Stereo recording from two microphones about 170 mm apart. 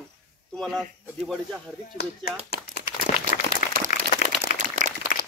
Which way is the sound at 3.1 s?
45° left (ahead or behind).